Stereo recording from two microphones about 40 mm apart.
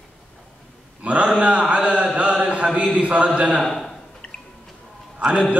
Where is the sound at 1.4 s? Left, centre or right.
Right.